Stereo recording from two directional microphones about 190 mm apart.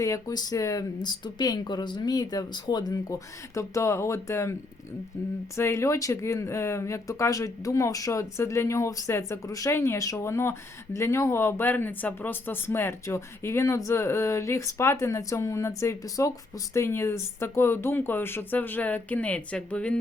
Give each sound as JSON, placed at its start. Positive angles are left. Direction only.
{"t": 0.0, "sound": "speech", "side_deg": 20}
{"t": 5.5, "sound": "speech", "side_deg": 15}